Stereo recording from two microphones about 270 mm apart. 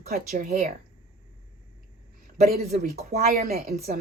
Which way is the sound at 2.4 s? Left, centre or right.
Right.